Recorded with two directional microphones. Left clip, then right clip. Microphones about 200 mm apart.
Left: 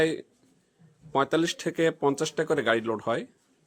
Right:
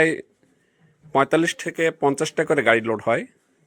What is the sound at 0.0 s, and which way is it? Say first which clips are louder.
A man's voice: right 6 dB; 20° right (ahead or behind).